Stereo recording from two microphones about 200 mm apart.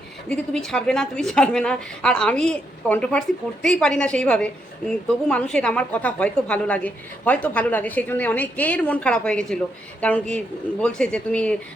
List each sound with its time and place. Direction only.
0.3 s a woman's voice: centre (ahead or behind)